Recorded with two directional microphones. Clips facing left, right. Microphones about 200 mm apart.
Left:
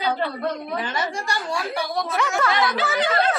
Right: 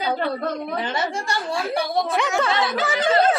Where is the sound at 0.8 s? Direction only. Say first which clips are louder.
Right 2 dB; 25° right (ahead or behind).